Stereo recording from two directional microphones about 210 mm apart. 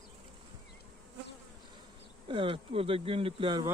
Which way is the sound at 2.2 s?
25° right (ahead or behind).